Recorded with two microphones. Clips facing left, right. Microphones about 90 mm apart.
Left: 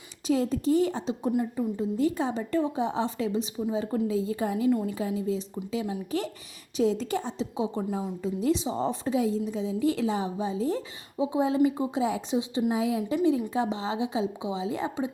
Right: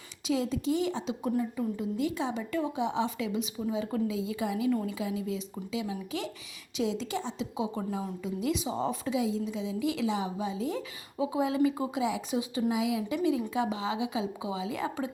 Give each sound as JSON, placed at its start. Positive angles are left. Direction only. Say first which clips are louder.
{"t": 0.3, "sound": "a woman's voice", "louder": "left 4 dB", "side_deg": 45}
{"t": 7.3, "sound": "a woman's voice", "louder": "left 3 dB", "side_deg": 35}
{"t": 11.9, "sound": "a woman's voice", "louder": "left 3 dB", "side_deg": 40}
{"t": 12.3, "sound": "a woman's voice", "louder": "left 3 dB", "side_deg": 25}
{"t": 12.7, "sound": "a woman's voice", "louder": "left 3 dB", "side_deg": 40}